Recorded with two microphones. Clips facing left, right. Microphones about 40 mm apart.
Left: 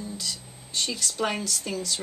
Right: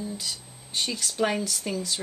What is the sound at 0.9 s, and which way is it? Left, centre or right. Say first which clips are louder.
Speech: right 2 dB; centre.